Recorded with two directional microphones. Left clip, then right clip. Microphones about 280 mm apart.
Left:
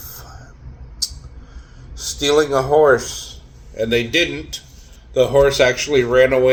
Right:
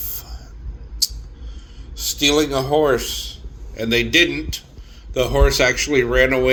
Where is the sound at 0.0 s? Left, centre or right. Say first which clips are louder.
Right 1 dB; right.